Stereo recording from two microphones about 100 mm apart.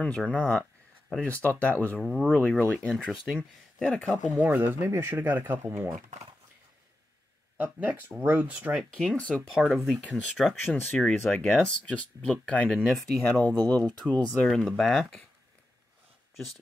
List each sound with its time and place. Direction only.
0.0 s speech: 10° left (ahead or behind)
2.0 s speech: centre (ahead or behind)
2.2 s speech: 15° left (ahead or behind)
3.3 s speech: 10° right (ahead or behind); by 5.9 s 30° right (ahead or behind)
7.5 s speech: 15° right (ahead or behind)
8.9 s speech: 5° left (ahead or behind)
10.7 s speech: 10° left (ahead or behind)
13.3 s speech: 15° left (ahead or behind); by 15.2 s centre (ahead or behind)